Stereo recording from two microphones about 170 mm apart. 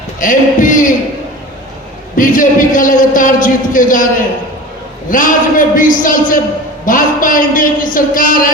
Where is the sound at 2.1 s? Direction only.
50° left (ahead or behind).